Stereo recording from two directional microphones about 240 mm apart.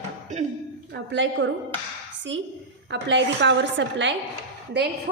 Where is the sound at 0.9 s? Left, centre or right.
Right.